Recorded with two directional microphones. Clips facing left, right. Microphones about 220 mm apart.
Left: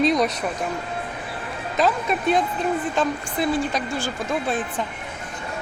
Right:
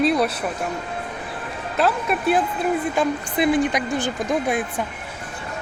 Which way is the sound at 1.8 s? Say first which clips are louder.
Right 1 dB; 5° right (ahead or behind).